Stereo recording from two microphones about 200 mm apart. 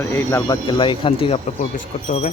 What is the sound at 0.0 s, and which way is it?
Speech, 10° left (ahead or behind).